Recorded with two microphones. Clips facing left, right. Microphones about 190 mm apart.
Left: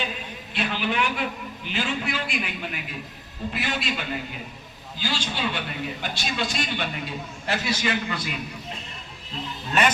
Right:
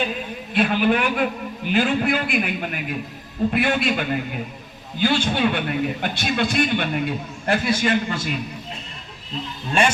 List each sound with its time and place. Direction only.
0.5 s a man's voice: 50° right (ahead or behind)